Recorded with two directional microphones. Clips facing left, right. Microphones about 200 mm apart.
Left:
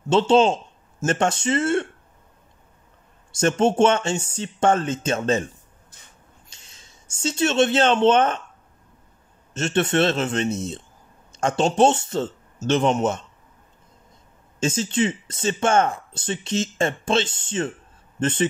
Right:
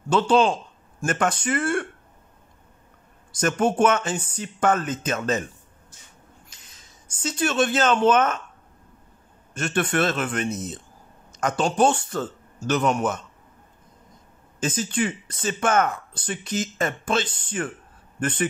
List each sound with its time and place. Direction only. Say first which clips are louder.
0.1 s speech: left 2 dB; 25° left (ahead or behind)
3.3 s speech: left 3 dB; 25° left (ahead or behind)
5.9 s a sound: left 1 dB; 60° left (ahead or behind)
6.5 s speech: even; 25° left (ahead or behind)
9.5 s speech: left 3 dB; 25° left (ahead or behind)
14.6 s speech: left 3 dB; 25° left (ahead or behind)